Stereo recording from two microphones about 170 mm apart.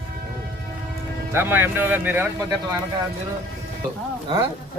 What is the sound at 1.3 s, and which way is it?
A man's voice, 10° right (ahead or behind).